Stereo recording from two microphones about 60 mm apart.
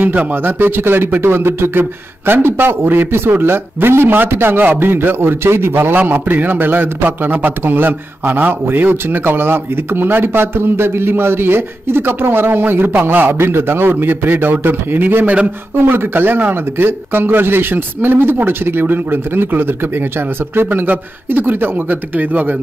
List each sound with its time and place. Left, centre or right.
0.0 s a man's voice: right
0.5 s a man's voice: right